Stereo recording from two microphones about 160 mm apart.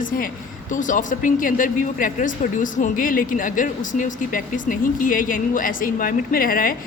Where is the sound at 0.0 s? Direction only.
60° left (ahead or behind).